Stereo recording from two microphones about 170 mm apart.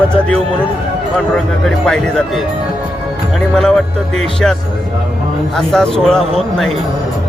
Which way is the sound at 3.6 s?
5° left (ahead or behind).